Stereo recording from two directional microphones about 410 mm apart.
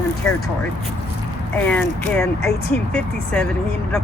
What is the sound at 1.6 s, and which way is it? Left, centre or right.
Speech, centre.